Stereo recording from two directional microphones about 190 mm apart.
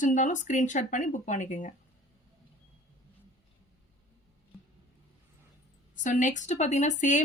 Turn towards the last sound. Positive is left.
turn(degrees=40)  # may be behind; listen again after turning